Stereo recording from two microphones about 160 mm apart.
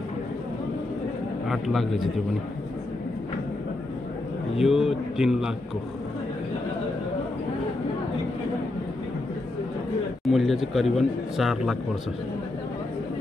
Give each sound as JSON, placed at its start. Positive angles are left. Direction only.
{"t": 1.5, "sound": "speech", "side_deg": 0}
{"t": 4.6, "sound": "speech", "side_deg": 0}
{"t": 10.2, "sound": "speech", "side_deg": 0}